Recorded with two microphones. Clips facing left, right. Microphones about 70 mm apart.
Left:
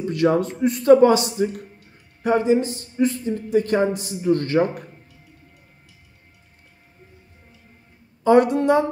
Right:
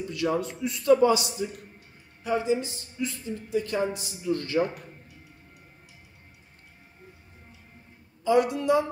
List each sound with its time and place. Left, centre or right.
0.0 s a man's voice: left
8.2 s a man's voice: left